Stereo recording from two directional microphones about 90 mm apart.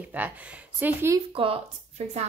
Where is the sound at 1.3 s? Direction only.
90° right.